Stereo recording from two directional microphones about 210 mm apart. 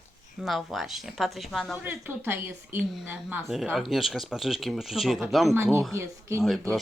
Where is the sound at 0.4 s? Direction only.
Centre (ahead or behind).